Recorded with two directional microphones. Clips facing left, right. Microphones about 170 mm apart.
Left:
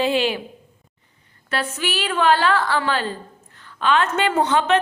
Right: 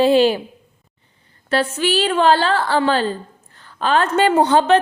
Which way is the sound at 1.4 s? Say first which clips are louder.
Right 7 dB; 30° right (ahead or behind).